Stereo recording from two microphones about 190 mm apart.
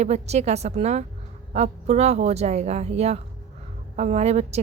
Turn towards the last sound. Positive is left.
turn(degrees=-35)  # may be behind; listen again after turning